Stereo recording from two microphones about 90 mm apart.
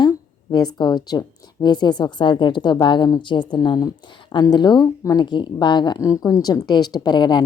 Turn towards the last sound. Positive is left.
turn(degrees=55)  # may be behind; listen again after turning